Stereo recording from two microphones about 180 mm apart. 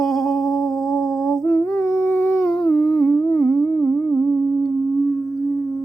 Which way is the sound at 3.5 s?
Centre (ahead or behind).